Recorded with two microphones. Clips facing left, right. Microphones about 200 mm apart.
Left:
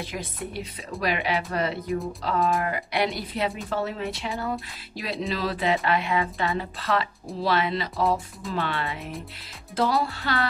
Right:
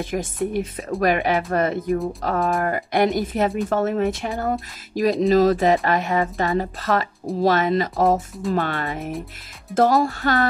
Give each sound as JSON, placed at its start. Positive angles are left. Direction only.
{"t": 0.0, "sound": "speech", "side_deg": -50}